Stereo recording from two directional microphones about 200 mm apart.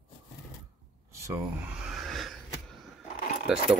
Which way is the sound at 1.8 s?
Centre (ahead or behind).